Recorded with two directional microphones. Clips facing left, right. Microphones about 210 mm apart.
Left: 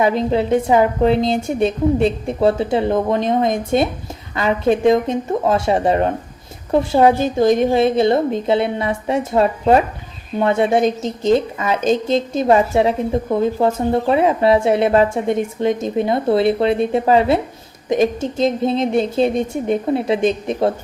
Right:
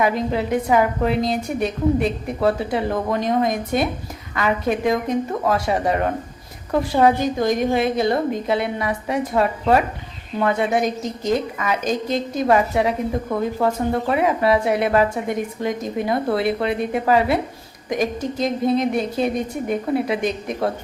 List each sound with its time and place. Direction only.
0.0 s speech: 25° left (ahead or behind)